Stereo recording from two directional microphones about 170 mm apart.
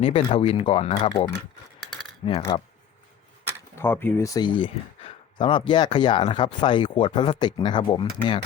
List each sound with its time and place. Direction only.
0.0 s speech: 35° left (ahead or behind)
0.9 s speech: 20° left (ahead or behind)
1.8 s a sound: centre (ahead or behind)
2.2 s speech: 30° left (ahead or behind)
3.8 s speech: 10° left (ahead or behind)
4.4 s speech: 30° left (ahead or behind)